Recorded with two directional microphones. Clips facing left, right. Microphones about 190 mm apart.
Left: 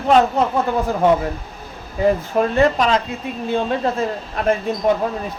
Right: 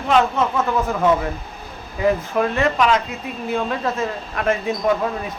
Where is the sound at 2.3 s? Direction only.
35° left (ahead or behind).